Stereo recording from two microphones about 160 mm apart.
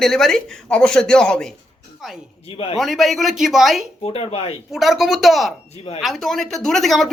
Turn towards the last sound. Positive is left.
turn(degrees=0)  # may be behind; listen again after turning